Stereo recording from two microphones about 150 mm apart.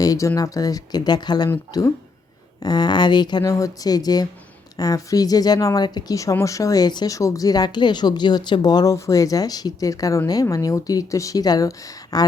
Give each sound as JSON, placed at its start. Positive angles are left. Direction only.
{"t": 0.0, "sound": "speech", "side_deg": 20}